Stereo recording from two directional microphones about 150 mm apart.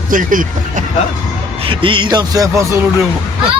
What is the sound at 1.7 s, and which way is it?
Speech, 35° right (ahead or behind).